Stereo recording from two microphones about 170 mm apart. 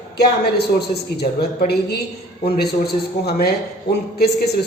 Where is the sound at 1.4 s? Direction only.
70° left (ahead or behind).